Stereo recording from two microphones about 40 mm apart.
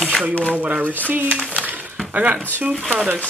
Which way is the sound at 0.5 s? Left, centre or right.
Right.